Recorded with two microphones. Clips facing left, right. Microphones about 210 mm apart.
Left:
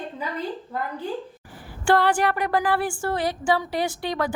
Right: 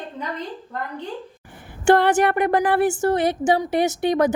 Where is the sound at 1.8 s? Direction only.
20° right (ahead or behind).